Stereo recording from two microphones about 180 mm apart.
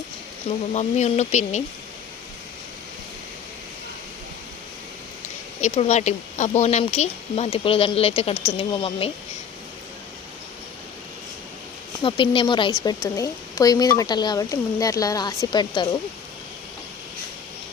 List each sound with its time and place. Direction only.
0.7 s speech: 40° left (ahead or behind)
5.5 s speech: 35° left (ahead or behind)
12.0 s a woman's voice: 30° left (ahead or behind)